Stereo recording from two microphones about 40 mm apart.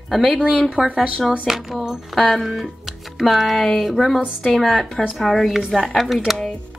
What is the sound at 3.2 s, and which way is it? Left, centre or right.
A woman's voice, centre.